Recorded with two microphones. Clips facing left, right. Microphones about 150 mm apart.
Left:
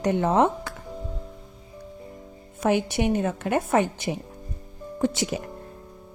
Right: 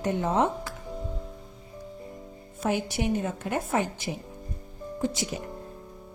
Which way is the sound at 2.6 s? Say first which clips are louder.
Left 5 dB; 70° left (ahead or behind).